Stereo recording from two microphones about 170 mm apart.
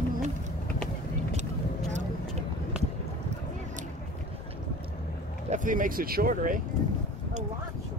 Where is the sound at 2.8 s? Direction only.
5° right (ahead or behind).